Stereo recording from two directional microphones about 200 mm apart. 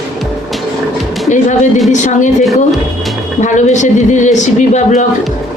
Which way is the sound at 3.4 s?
35° left (ahead or behind).